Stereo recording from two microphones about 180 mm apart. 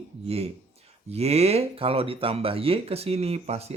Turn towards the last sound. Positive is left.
turn(degrees=-35)  # may be behind; listen again after turning